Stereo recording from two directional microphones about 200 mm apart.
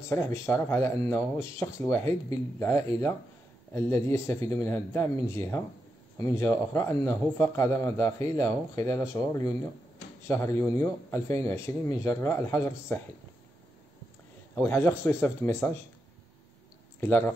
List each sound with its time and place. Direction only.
0.0 s speech: 15° left (ahead or behind)
14.5 s speech: 10° left (ahead or behind)
17.0 s speech: 10° left (ahead or behind)